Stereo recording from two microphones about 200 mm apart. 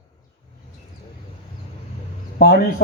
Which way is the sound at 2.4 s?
50° left (ahead or behind).